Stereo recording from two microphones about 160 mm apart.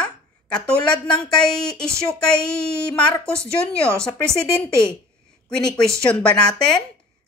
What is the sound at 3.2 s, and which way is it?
Speech, 15° right (ahead or behind).